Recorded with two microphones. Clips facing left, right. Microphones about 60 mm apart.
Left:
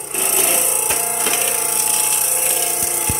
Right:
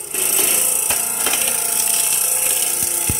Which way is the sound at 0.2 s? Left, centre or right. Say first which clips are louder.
Left 4 dB; left.